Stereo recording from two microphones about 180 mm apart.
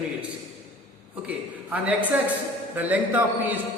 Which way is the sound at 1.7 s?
10° right (ahead or behind).